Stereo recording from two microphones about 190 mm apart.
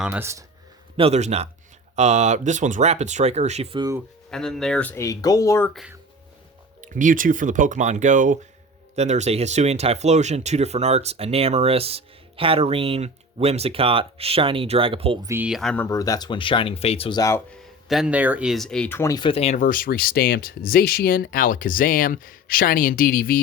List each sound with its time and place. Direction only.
0.0 s speech: 10° right (ahead or behind)
0.9 s speech: 30° right (ahead or behind)
4.3 s speech: 5° left (ahead or behind)
6.8 s speech: 45° right (ahead or behind); by 15.3 s 30° right (ahead or behind)
15.3 s speech: 5° right (ahead or behind); by 17.4 s 20° left (ahead or behind)
17.5 s speech: centre (ahead or behind); by 23.4 s 45° left (ahead or behind)